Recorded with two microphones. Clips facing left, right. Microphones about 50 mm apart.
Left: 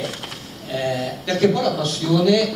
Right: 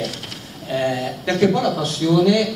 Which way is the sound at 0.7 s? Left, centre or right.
Right.